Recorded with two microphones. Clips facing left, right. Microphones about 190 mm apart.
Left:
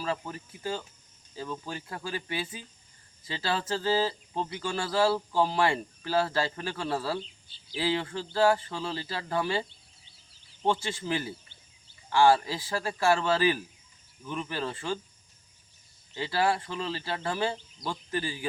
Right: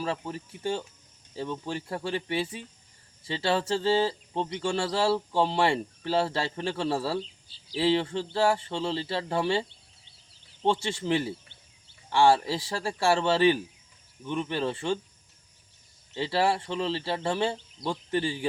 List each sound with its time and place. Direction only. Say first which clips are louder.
0.0 s a man's voice: right 1 dB; 25° right (ahead or behind)
10.7 s a man's voice: right 3 dB; 30° right (ahead or behind)
16.1 s a man's voice: right 2 dB; 30° right (ahead or behind)